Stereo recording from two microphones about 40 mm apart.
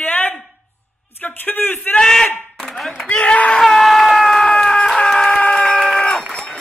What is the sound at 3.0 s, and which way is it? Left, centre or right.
Speech, left.